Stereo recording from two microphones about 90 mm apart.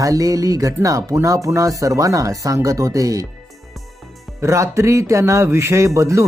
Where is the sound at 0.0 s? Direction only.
40° right (ahead or behind).